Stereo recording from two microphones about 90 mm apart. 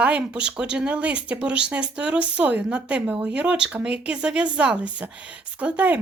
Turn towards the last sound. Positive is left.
turn(degrees=-15)  # may be behind; listen again after turning